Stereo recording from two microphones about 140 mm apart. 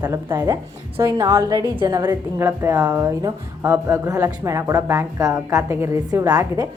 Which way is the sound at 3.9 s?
25° right (ahead or behind).